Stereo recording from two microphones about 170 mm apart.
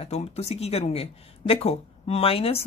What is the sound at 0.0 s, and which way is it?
Speech, 40° left (ahead or behind).